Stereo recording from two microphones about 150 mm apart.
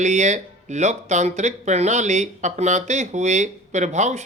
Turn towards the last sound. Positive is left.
turn(degrees=-50)  # may be behind; listen again after turning